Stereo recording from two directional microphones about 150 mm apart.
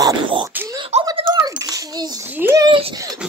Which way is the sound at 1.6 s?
25° right (ahead or behind).